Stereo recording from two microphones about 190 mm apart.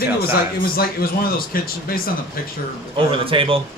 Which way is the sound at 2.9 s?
30° right (ahead or behind).